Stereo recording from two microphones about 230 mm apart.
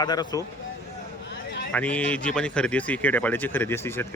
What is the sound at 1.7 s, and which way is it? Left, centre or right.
Speech, centre.